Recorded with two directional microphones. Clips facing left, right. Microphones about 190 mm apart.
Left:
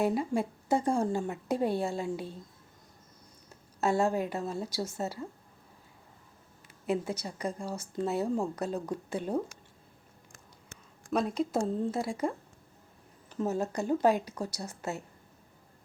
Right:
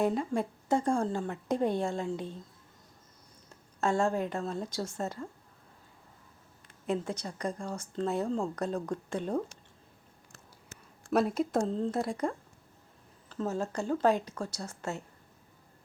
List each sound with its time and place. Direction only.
0.0 s speech: 10° left (ahead or behind)
3.8 s speech: 10° left (ahead or behind)
6.8 s speech: 10° left (ahead or behind)
11.1 s a woman's voice: 5° right (ahead or behind)
11.5 s a woman's voice: 10° left (ahead or behind)
13.2 s speech: 15° left (ahead or behind)